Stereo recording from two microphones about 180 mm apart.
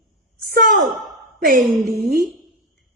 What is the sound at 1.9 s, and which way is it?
Speech, 65° right (ahead or behind).